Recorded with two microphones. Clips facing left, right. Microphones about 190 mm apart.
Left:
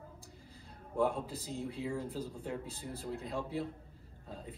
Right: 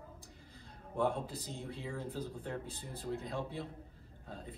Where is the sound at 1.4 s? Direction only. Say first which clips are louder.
Left 5 dB; 10° left (ahead or behind).